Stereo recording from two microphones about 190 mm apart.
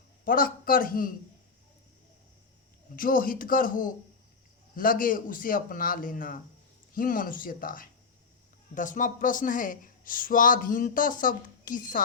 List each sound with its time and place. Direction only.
0.3 s speech: 50° left (ahead or behind)
2.9 s speech: 45° left (ahead or behind)